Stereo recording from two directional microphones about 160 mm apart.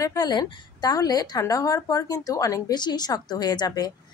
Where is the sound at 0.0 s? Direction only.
25° left (ahead or behind).